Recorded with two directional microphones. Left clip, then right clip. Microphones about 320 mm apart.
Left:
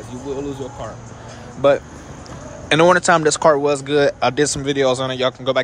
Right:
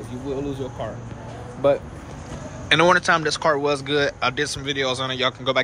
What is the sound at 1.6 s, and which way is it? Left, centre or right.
Speech, left.